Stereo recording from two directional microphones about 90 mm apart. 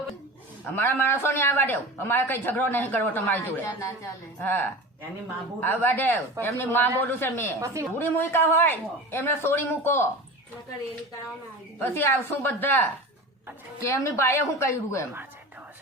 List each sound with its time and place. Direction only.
0.8 s a man's voice: 25° left (ahead or behind)
3.6 s a woman's voice: 35° left (ahead or behind)
4.4 s a man's voice: 20° left (ahead or behind)
7.6 s speech: 35° right (ahead or behind)
7.9 s a man's voice: 25° left (ahead or behind)
11.8 s a man's voice: 25° left (ahead or behind)
13.7 s a woman's voice: 30° left (ahead or behind)